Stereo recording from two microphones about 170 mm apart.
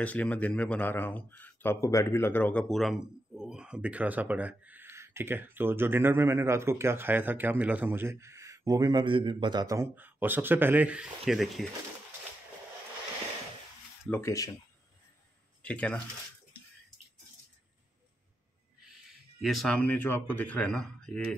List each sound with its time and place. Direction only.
0.0 s speech: 10° left (ahead or behind)
14.2 s speech: 20° left (ahead or behind)
15.6 s speech: 5° left (ahead or behind)
19.0 s speech: centre (ahead or behind)